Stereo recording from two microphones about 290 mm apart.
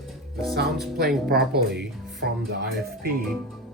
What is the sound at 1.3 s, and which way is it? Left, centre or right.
Speech, right.